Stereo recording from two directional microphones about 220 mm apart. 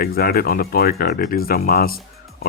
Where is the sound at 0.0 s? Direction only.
45° left (ahead or behind).